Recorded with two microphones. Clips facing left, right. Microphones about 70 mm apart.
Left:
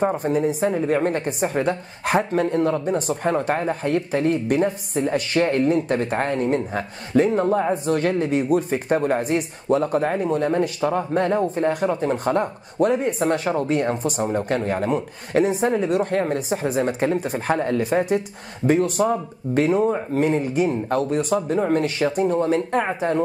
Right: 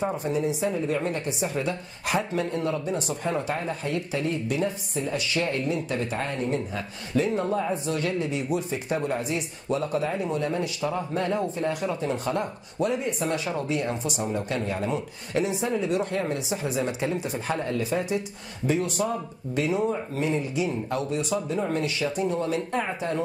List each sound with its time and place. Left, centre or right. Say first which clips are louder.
0.0 s a woman's voice: left 6 dB; left